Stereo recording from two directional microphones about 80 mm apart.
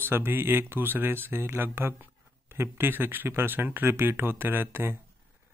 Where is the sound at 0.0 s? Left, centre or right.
Right.